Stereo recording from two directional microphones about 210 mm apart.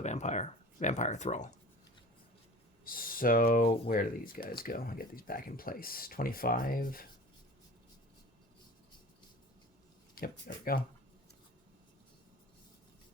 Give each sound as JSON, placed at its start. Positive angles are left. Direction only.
{"t": 0.0, "sound": "speech", "side_deg": 35}
{"t": 2.8, "sound": "speech", "side_deg": 45}
{"t": 10.2, "sound": "speech", "side_deg": 45}